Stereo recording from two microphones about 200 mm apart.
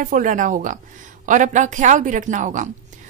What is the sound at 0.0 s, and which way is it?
A woman's voice, 40° right (ahead or behind).